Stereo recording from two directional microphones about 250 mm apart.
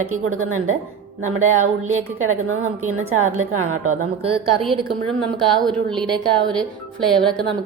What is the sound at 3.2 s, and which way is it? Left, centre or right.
Speech, right.